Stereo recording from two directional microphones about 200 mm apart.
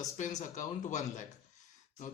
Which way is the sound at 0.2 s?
35° left (ahead or behind).